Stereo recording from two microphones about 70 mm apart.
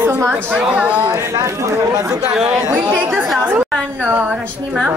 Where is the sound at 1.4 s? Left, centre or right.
Right.